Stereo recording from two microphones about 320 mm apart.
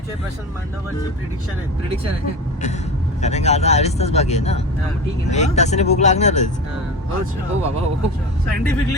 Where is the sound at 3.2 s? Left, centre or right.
Left.